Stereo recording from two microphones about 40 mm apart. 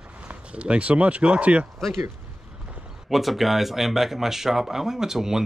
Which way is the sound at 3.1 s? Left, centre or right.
Centre.